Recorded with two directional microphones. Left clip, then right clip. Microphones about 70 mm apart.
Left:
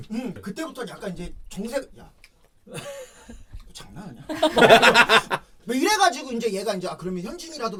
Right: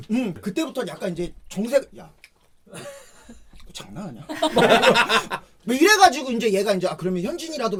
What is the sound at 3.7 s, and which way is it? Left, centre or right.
Speech, right.